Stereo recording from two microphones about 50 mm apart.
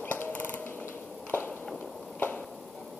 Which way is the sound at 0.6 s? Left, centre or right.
Left.